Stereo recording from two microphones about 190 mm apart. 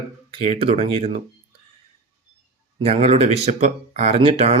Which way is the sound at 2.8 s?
30° right (ahead or behind).